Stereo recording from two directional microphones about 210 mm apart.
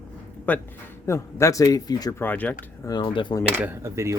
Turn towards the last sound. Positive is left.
turn(degrees=-15)  # may be behind; listen again after turning